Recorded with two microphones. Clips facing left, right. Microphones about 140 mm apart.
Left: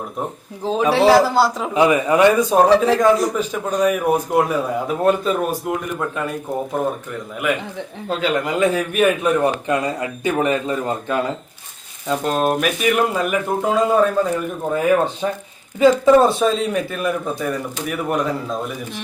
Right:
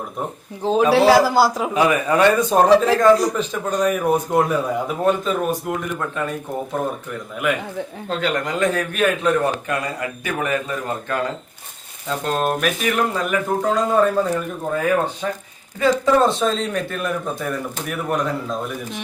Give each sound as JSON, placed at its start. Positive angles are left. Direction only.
{"t": 0.6, "sound": "a man's voice", "side_deg": 0}
{"t": 1.7, "sound": "a man's voice", "side_deg": 20}
{"t": 2.5, "sound": "a man's voice", "side_deg": 0}
{"t": 7.4, "sound": "a man's voice", "side_deg": 0}
{"t": 12.0, "sound": "a man's voice", "side_deg": 5}
{"t": 14.7, "sound": "a man's voice", "side_deg": 15}